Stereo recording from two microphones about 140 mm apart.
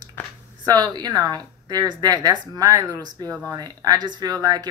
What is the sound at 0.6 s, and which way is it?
Speech, 30° right (ahead or behind).